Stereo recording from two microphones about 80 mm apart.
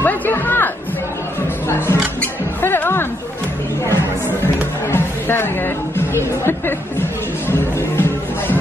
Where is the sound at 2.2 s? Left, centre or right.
Left.